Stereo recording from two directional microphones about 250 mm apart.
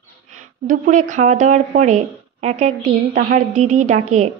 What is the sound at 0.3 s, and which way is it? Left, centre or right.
A woman's voice, right.